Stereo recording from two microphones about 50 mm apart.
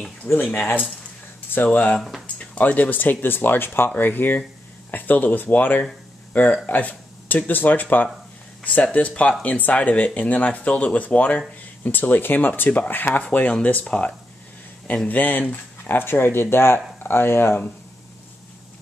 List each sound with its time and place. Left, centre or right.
0.4 s speech: left
2.0 s speech: centre
2.3 s speech: left
15.0 s speech: left